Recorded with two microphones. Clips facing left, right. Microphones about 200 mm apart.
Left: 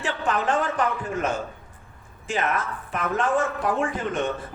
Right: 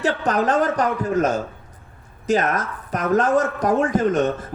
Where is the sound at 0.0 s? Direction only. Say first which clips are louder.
Right 5 dB; 40° right (ahead or behind).